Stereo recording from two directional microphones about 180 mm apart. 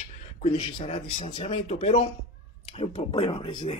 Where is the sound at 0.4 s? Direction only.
35° left (ahead or behind).